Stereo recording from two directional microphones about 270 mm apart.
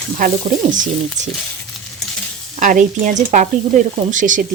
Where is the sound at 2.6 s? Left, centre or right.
Right.